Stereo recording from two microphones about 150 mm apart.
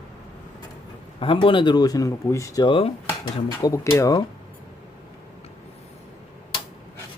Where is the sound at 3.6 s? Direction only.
20° left (ahead or behind).